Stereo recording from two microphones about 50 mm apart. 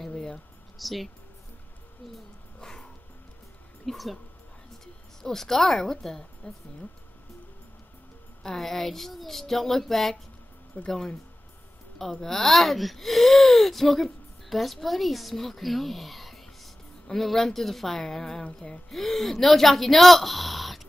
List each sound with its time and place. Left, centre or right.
0.0 s a sound: centre
0.7 s a woman's voice: centre
2.6 s music: centre
3.8 s a woman's voice: centre
5.2 s a woman's voice: centre
8.4 s a woman's voice: centre
10.8 s speech: left
12.0 s speech: centre